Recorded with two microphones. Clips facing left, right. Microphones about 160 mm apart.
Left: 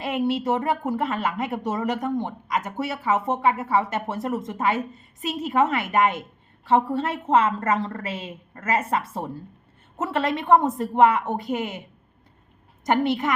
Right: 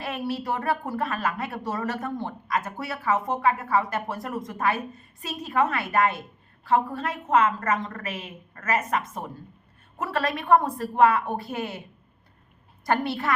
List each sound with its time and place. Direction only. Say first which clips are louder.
0.0 s a woman's voice: left 6 dB; 20° left (ahead or behind)
12.8 s a woman's voice: left 4 dB; 20° left (ahead or behind)